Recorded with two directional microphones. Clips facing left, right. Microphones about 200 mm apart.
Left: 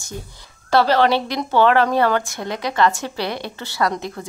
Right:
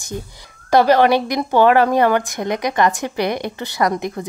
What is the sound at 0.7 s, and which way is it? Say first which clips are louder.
Speech: right 3 dB; 15° right (ahead or behind).